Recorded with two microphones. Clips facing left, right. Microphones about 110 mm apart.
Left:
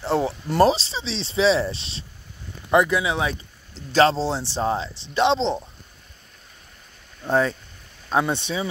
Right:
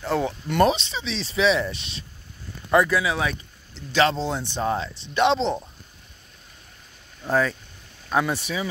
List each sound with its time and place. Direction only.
0.0 s speech: 30° left (ahead or behind)
3.7 s speech: 40° left (ahead or behind)
7.2 s speech: 25° left (ahead or behind)